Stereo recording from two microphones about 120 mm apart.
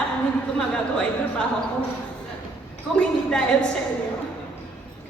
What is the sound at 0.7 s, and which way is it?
Speech, 10° left (ahead or behind).